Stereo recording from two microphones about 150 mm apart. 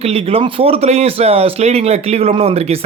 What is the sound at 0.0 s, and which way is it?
Speech, 40° right (ahead or behind).